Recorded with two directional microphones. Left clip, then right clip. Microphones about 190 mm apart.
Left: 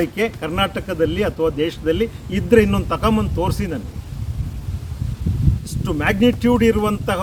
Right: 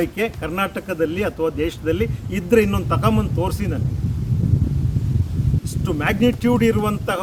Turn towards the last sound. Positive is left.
turn(degrees=15)  # may be behind; listen again after turning